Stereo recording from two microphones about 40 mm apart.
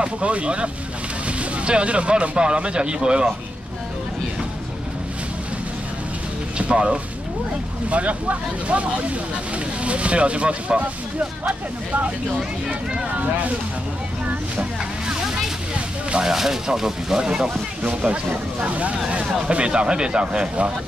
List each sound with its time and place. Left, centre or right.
0.0 s speech: right
6.6 s a sound: right
7.9 s speech: right
12.4 s speech: centre
14.2 s speech: right
16.3 s speech: centre